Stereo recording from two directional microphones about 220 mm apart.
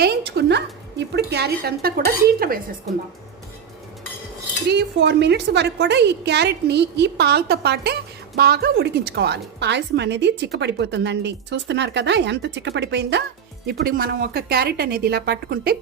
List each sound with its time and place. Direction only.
0.0 s a woman's voice: 50° right (ahead or behind)
4.7 s a woman's voice: 50° right (ahead or behind)